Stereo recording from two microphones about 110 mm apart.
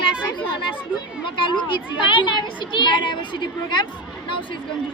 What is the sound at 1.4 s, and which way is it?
A child's voice, 50° left (ahead or behind).